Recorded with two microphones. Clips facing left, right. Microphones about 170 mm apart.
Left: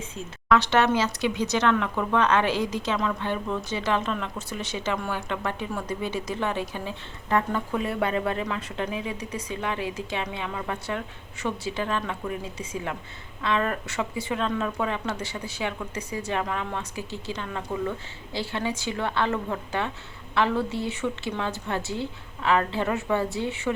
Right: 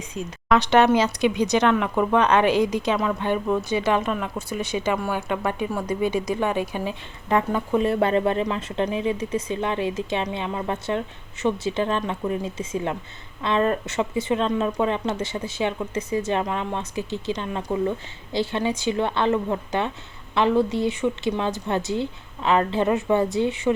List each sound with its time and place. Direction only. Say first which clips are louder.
0.1 s speech: right 2 dB; 15° right (ahead or behind)
7.9 s speech: right 6 dB; 30° right (ahead or behind)